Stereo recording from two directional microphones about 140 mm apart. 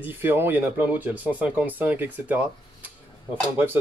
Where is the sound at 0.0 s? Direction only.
15° right (ahead or behind).